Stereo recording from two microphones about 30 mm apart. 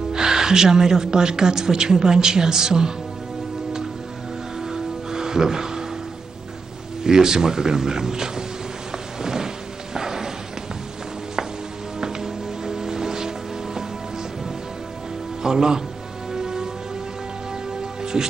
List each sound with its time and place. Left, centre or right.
0.1 s a woman's voice: right
4.6 s music: centre
7.0 s a woman's voice: right
9.2 s a sound: centre
12.0 s music: centre
15.4 s a man's voice: centre
16.3 s music: centre
18.0 s music: right